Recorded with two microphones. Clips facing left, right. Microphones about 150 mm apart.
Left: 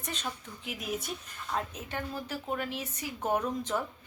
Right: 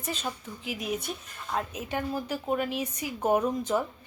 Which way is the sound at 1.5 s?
10° right (ahead or behind).